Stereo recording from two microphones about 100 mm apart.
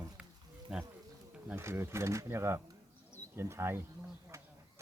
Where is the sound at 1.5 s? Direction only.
25° right (ahead or behind).